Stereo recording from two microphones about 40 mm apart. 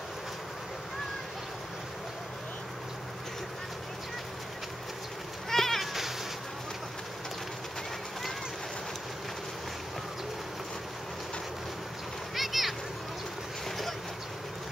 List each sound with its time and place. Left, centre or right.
5.5 s goat: centre
12.4 s a sound: centre
13.7 s vehicle: centre